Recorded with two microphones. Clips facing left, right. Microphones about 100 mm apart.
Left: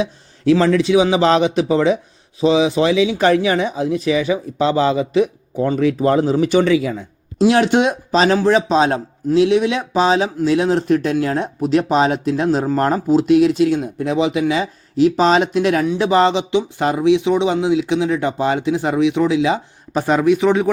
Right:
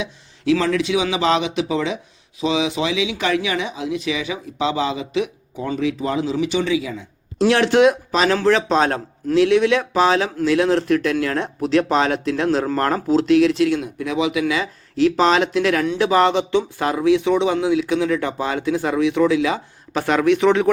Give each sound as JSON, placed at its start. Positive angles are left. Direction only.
{"t": 0.0, "sound": "speech", "side_deg": 40}
{"t": 7.3, "sound": "speech", "side_deg": 20}
{"t": 13.7, "sound": "speech", "side_deg": 35}
{"t": 14.9, "sound": "a man's voice", "side_deg": 20}